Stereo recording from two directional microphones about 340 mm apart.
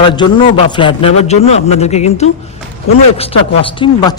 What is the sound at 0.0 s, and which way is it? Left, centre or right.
A man's voice, centre.